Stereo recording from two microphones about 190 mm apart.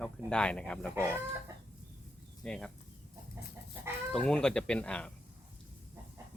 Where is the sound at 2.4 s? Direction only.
5° left (ahead or behind).